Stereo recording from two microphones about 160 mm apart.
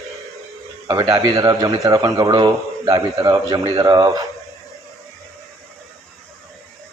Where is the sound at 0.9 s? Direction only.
20° right (ahead or behind).